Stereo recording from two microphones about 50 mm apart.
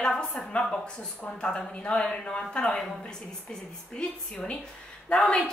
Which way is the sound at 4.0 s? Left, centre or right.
Left.